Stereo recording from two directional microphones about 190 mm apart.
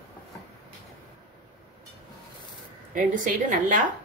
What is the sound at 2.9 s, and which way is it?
Speech, 45° right (ahead or behind).